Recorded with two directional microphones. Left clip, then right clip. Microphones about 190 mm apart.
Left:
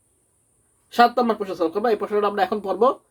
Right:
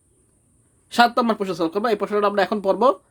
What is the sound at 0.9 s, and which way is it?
Speech, 45° right (ahead or behind).